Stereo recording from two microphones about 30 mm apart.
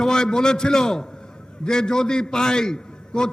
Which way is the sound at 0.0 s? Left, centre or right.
Left.